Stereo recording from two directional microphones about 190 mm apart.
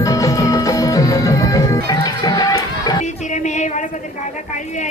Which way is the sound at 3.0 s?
40° left (ahead or behind).